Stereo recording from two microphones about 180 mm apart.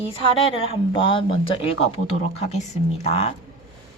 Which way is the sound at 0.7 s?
30° left (ahead or behind).